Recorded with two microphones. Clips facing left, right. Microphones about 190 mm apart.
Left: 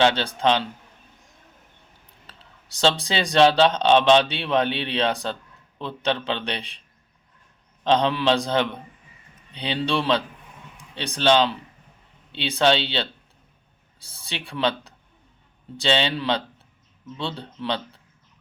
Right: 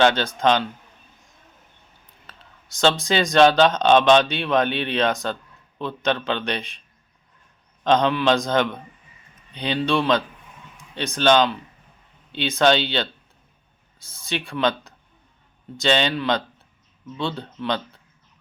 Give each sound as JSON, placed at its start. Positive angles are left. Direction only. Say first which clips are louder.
{"t": 0.1, "sound": "a man's voice", "louder": "right 2 dB", "side_deg": 30}
{"t": 2.2, "sound": "a man's voice", "louder": "right 2 dB", "side_deg": 35}
{"t": 7.9, "sound": "a man's voice", "louder": "right 2 dB", "side_deg": 30}